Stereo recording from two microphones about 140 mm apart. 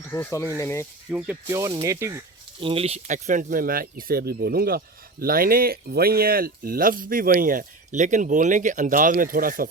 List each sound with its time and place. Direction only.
0.1 s speech: 20° left (ahead or behind)
1.1 s speech: 10° right (ahead or behind)
1.5 s speech: 25° right (ahead or behind)
2.6 s speech: 40° right (ahead or behind); by 9.6 s 90° right